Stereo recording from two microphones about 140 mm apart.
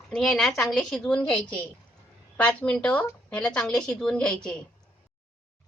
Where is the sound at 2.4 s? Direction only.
10° left (ahead or behind).